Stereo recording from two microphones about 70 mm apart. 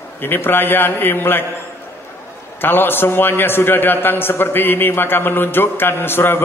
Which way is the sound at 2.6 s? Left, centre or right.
Left.